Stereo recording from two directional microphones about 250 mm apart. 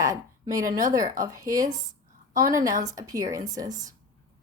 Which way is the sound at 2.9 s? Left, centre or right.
Centre.